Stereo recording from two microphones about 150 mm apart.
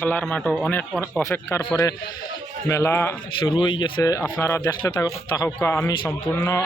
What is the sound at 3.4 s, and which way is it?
Speech, 30° left (ahead or behind).